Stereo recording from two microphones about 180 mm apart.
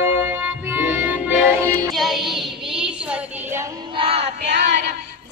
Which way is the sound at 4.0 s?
35° right (ahead or behind).